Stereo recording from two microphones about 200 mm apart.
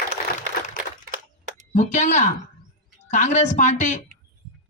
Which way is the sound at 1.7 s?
35° left (ahead or behind).